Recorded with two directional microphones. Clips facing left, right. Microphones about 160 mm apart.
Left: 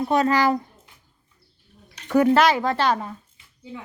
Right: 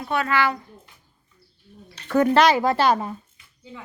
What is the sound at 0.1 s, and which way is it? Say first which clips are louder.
Speech: left 2 dB; 35° left (ahead or behind).